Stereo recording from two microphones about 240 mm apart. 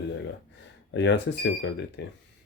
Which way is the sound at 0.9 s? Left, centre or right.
Left.